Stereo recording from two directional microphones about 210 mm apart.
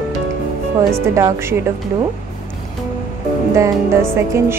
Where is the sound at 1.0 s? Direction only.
15° right (ahead or behind).